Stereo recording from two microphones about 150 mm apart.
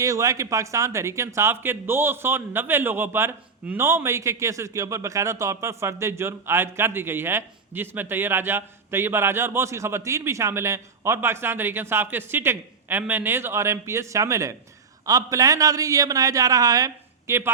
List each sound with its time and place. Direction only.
0.0 s a man's voice: 20° right (ahead or behind)